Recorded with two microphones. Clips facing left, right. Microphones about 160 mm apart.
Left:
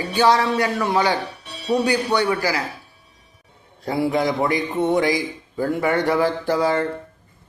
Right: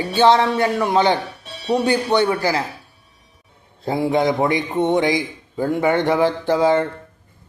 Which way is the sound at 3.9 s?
25° right (ahead or behind).